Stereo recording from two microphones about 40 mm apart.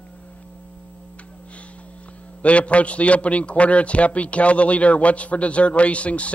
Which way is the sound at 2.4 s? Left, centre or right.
Left.